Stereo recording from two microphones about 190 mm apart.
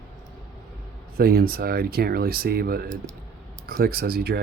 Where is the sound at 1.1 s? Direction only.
50° right (ahead or behind).